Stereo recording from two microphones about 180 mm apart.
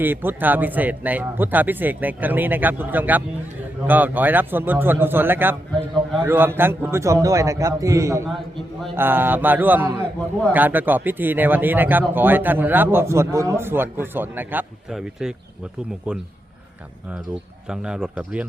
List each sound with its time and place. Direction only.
0.0 s speech: 10° right (ahead or behind)
17.7 s speech: 5° right (ahead or behind)